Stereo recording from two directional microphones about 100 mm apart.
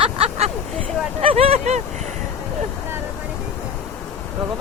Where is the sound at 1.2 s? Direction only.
75° right (ahead or behind).